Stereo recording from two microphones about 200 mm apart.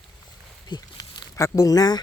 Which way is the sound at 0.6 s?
20° left (ahead or behind).